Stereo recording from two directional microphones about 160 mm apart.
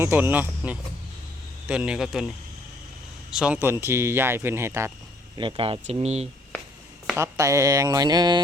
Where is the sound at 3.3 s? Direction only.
5° right (ahead or behind).